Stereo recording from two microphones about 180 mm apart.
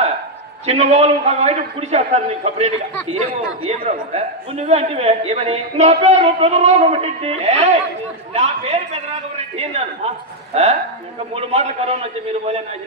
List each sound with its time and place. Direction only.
0.7 s a woman's voice: 35° right (ahead or behind)